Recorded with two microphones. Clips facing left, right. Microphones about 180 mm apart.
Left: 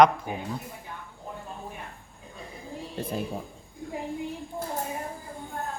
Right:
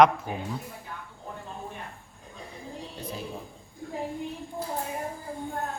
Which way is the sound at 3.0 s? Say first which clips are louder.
Left 6 dB; 55° left (ahead or behind).